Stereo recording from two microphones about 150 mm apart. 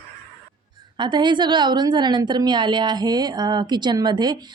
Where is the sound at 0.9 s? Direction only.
30° right (ahead or behind).